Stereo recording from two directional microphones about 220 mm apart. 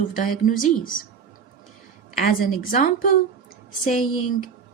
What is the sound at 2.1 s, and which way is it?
A woman's voice, 40° left (ahead or behind).